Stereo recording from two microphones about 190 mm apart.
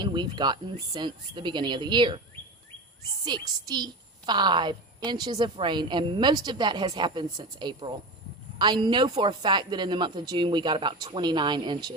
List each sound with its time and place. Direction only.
0.0 s a woman's voice: 25° right (ahead or behind)
3.2 s a woman's voice: 20° right (ahead or behind)